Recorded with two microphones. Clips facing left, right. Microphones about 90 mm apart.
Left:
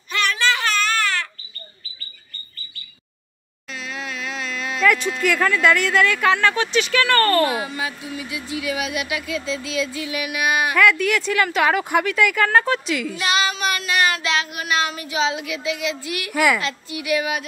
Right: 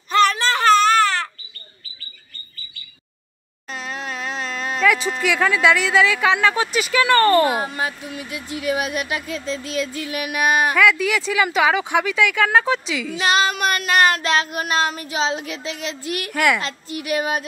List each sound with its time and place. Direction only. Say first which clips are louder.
0.1 s babbling: right 4 dB; 35° right (ahead or behind)
3.7 s a sound: right 2 dB; 45° right (ahead or behind)
4.8 s speech: even; centre (ahead or behind)
7.5 s speech: right 2 dB; 40° right (ahead or behind)
10.8 s speech: even; centre (ahead or behind)
13.2 s child singing: right 4 dB; 40° right (ahead or behind)
13.5 s child singing: right 3 dB; 50° right (ahead or behind)
16.3 s speech: left 1 dB; 5° left (ahead or behind)
16.6 s child singing: left 1 dB; 40° right (ahead or behind)